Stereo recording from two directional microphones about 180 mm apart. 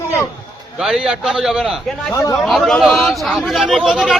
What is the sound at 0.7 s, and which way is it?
Speech, centre (ahead or behind).